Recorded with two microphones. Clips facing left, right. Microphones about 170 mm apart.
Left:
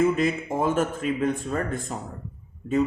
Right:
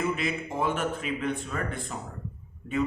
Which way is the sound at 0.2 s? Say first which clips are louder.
Left 5 dB; 40° left (ahead or behind).